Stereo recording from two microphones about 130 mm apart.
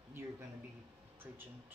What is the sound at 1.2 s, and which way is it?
Speech, 15° right (ahead or behind).